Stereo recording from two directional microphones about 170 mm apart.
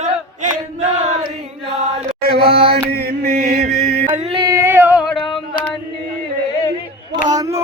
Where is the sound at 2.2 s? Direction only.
65° right (ahead or behind).